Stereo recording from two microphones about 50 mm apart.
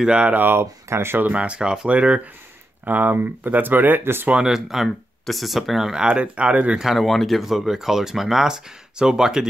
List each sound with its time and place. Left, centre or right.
0.0 s speech: centre
0.3 s speech: right
0.6 s speech: right
1.3 s speech: right
2.8 s speech: right
4.5 s speech: centre
6.0 s speech: right
6.8 s speech: centre